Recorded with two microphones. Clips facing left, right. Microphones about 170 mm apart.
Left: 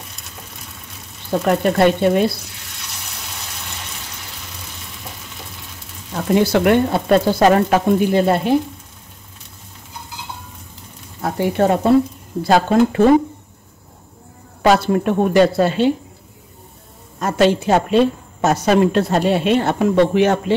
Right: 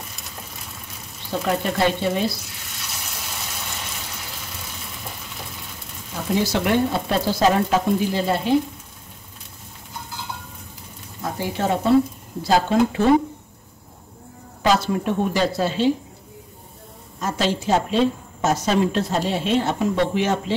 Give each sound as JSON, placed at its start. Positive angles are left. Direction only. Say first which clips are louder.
{"t": 1.4, "sound": "a woman's voice", "louder": "left 6 dB", "side_deg": 60}
{"t": 6.3, "sound": "a woman's voice", "louder": "left 6 dB", "side_deg": 55}
{"t": 11.2, "sound": "a woman's voice", "louder": "left 7 dB", "side_deg": 60}
{"t": 14.6, "sound": "a woman's voice", "louder": "left 5 dB", "side_deg": 60}
{"t": 17.2, "sound": "a woman's voice", "louder": "left 8 dB", "side_deg": 60}